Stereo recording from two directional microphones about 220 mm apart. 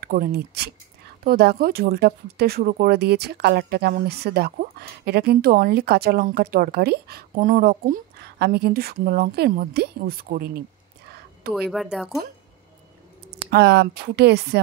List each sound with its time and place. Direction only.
0.0 s speech: 45° right (ahead or behind)
11.5 s speech: centre (ahead or behind)
13.5 s speech: 50° right (ahead or behind)